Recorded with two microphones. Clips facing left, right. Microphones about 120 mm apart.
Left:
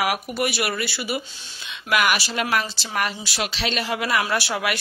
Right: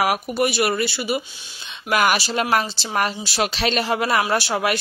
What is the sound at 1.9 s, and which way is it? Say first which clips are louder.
Speech: right 2 dB; 35° right (ahead or behind).